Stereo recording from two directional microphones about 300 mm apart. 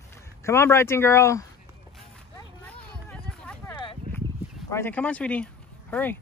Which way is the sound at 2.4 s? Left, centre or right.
Centre.